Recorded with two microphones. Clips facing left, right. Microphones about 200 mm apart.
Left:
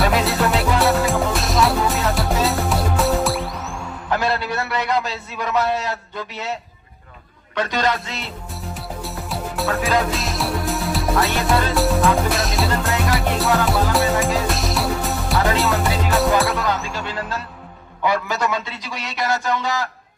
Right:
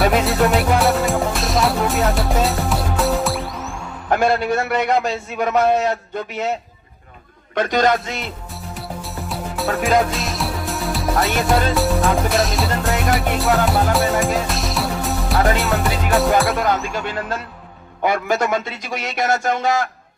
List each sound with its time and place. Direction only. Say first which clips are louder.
0.3 s music: right 3 dB; centre (ahead or behind)
4.1 s a man's voice: right 5 dB; 50° right (ahead or behind)
7.5 s a man's voice: right 4 dB; 50° right (ahead or behind)
8.7 s music: right 1 dB; centre (ahead or behind)
16.5 s a man's voice: right 3 dB; 50° right (ahead or behind)